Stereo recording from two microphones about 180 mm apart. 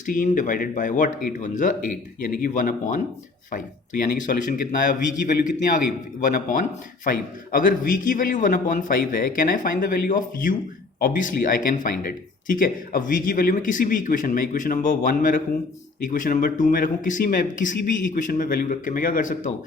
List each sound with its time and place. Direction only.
0.0 s speech: 45° left (ahead or behind)